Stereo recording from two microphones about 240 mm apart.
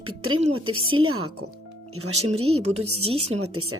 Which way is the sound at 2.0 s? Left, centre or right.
Right.